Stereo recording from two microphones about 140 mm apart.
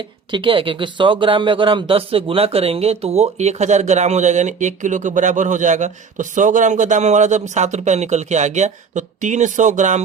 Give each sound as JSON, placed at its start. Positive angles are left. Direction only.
{"t": 0.3, "sound": "speech", "side_deg": -35}